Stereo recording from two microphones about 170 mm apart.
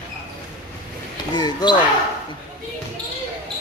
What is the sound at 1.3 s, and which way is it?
Speech, 25° left (ahead or behind).